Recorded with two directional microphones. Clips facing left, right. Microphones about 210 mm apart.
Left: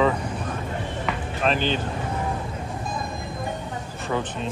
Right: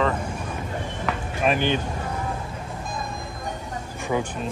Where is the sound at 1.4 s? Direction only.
15° right (ahead or behind).